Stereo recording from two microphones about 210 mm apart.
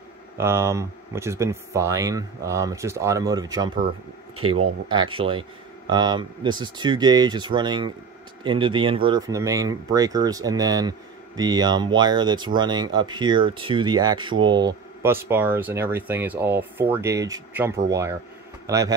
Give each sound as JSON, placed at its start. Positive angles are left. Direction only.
{"t": 0.4, "sound": "speech", "side_deg": -10}
{"t": 4.4, "sound": "speech", "side_deg": -90}
{"t": 4.8, "sound": "speech", "side_deg": -20}